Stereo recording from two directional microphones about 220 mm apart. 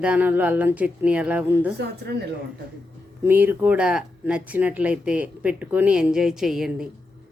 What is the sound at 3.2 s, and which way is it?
Speech, 10° right (ahead or behind).